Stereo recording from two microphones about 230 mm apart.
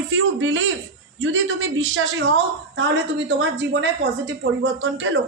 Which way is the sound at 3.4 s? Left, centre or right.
Right.